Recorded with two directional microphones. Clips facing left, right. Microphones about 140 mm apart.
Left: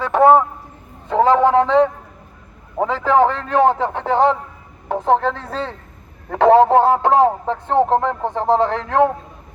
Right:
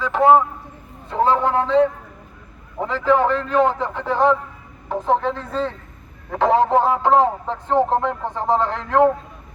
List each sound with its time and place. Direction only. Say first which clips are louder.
0.0 s a sound: left 2 dB; 60° left (ahead or behind)
1.1 s a man's voice: left 5 dB; 90° left
2.8 s a man's voice: left 3 dB; 80° left; by 9.0 s 60° left (ahead or behind)